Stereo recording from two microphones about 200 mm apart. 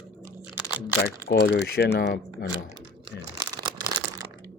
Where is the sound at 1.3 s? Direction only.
55° left (ahead or behind).